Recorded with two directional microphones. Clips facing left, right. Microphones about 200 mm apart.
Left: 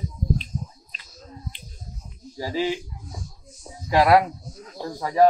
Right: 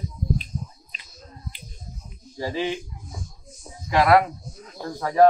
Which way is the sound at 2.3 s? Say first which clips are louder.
Left 1 dB; 10° left (ahead or behind).